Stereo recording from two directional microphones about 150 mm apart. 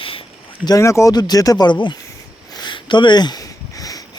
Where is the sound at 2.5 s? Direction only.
30° left (ahead or behind).